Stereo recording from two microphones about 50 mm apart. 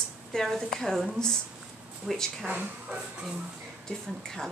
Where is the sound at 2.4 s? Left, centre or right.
Right.